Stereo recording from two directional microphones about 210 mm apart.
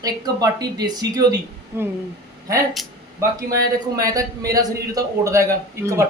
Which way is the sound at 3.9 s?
15° right (ahead or behind).